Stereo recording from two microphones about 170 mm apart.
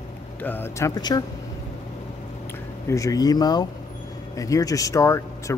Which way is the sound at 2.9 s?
20° left (ahead or behind).